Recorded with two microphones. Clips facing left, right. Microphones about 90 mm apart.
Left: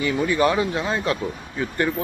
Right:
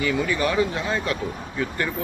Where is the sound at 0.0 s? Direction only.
25° left (ahead or behind).